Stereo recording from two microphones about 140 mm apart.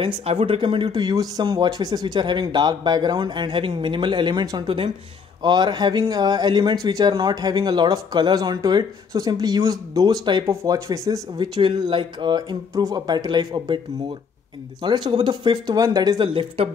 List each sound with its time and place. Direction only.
0.0 s speech: 45° right (ahead or behind)